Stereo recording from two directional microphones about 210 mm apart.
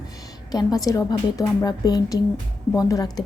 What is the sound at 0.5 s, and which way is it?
A woman's voice, 15° left (ahead or behind).